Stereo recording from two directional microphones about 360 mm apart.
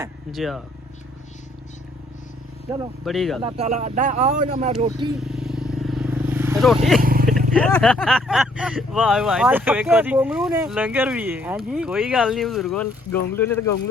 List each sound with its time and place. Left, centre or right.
0.0 s speech: centre
3.0 s speech: centre
3.4 s speech: centre
5.2 s vehicle: centre
7.0 s vehicle: right
7.5 s speech: centre